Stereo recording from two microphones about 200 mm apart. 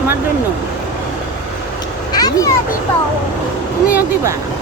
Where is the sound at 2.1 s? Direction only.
20° left (ahead or behind).